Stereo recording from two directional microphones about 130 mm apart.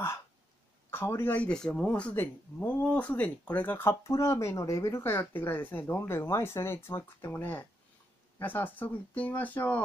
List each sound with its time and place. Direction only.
0.8 s speech: 20° left (ahead or behind)